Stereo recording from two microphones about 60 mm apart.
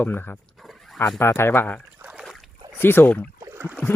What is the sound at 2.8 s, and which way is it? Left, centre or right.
Speech, left.